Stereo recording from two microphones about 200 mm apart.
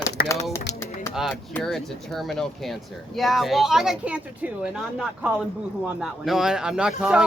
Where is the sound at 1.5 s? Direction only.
Centre (ahead or behind).